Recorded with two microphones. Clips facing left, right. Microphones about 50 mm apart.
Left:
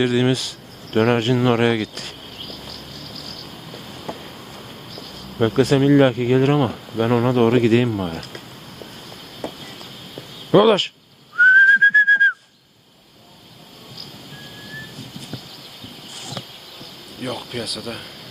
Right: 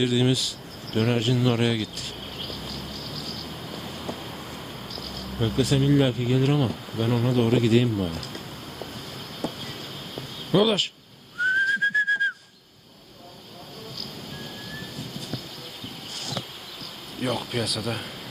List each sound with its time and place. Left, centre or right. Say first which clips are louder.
0.0 s speech: left 4 dB; left
4.1 s a sound: left 4 dB; left
5.4 s speech: left 7 dB; left
10.5 s speech: left 8 dB; left
11.4 s whistling: left 11 dB; left
17.2 s speech: right 1 dB; centre